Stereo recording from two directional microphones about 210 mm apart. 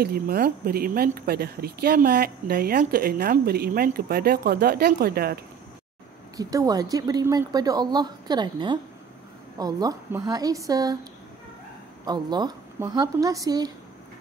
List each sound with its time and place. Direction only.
0.0 s speech: 45° right (ahead or behind)
6.3 s speech: 15° right (ahead or behind)
12.0 s speech: 20° right (ahead or behind)